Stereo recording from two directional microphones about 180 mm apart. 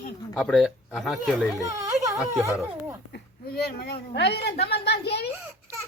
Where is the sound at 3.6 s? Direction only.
60° left (ahead or behind).